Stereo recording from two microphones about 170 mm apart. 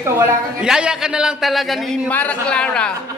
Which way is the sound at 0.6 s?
5° right (ahead or behind).